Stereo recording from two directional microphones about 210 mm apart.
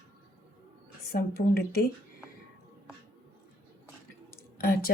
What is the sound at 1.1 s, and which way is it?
Speech, 45° left (ahead or behind).